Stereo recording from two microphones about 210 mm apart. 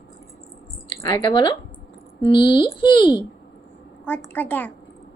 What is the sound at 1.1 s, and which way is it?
A woman's voice, 20° left (ahead or behind).